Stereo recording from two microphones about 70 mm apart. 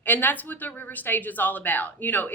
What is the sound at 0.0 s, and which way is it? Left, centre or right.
Speech, left.